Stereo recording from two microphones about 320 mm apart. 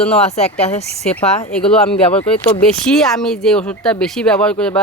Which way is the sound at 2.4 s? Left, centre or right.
Centre.